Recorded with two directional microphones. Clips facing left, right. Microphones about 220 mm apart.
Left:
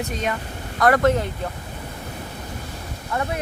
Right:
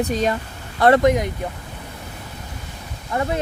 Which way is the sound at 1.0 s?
15° right (ahead or behind).